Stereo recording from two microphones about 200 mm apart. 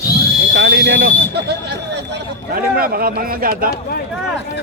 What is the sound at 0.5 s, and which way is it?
A man's voice, 60° right (ahead or behind).